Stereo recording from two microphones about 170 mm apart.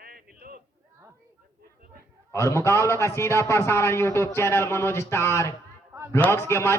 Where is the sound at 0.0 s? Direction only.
60° right (ahead or behind).